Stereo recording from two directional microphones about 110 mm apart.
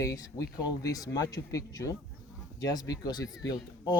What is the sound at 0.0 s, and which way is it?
Speech, 30° left (ahead or behind).